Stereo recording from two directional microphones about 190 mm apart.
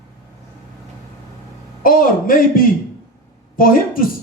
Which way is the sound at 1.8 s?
50° left (ahead or behind).